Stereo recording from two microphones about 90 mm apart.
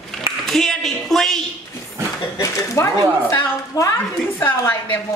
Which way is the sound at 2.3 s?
35° left (ahead or behind).